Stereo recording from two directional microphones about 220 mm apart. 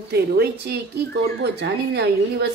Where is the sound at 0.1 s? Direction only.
45° right (ahead or behind).